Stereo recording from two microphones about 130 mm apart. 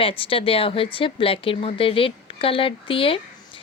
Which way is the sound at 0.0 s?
45° left (ahead or behind).